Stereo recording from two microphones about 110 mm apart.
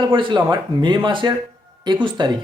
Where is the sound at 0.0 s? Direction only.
50° right (ahead or behind).